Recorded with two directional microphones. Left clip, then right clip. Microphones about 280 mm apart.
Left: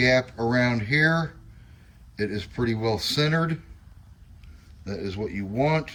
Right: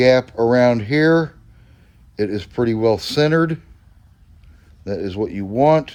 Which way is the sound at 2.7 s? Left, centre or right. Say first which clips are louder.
Right 8 dB; right.